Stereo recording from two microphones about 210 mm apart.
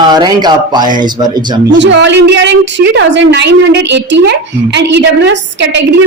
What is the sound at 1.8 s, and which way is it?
A woman's voice, 60° right (ahead or behind).